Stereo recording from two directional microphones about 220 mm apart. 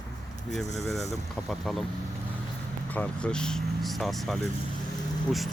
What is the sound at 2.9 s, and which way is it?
Speech, 5° left (ahead or behind).